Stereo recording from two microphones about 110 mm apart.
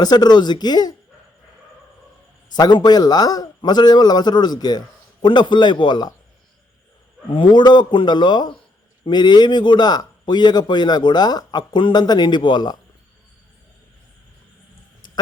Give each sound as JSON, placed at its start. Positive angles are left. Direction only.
{"t": 0.0, "sound": "a man's voice", "side_deg": 40}
{"t": 2.6, "sound": "a man's voice", "side_deg": 40}
{"t": 7.3, "sound": "a man's voice", "side_deg": 50}
{"t": 15.0, "sound": "a sound", "side_deg": 40}